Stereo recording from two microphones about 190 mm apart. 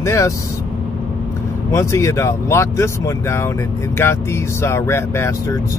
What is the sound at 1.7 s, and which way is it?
Speech, 15° left (ahead or behind).